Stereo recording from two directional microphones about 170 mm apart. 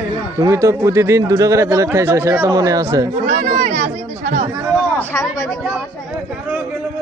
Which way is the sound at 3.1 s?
45° right (ahead or behind).